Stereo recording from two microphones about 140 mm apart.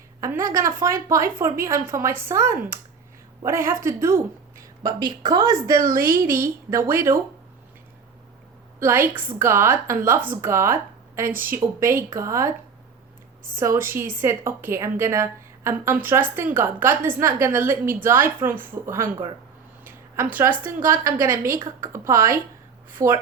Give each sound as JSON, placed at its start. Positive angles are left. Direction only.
{"t": 0.4, "sound": "a woman's voice", "side_deg": -20}
{"t": 4.8, "sound": "speech", "side_deg": -30}
{"t": 6.0, "sound": "a woman's voice", "side_deg": -90}
{"t": 6.3, "sound": "speech", "side_deg": -20}
{"t": 8.8, "sound": "a woman's voice", "side_deg": -15}
{"t": 13.8, "sound": "a woman's voice", "side_deg": -15}
{"t": 19.8, "sound": "a sound", "side_deg": -15}
{"t": 20.6, "sound": "a woman's voice", "side_deg": -15}